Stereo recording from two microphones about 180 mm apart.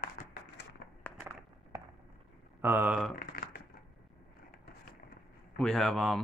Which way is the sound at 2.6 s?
10° right (ahead or behind).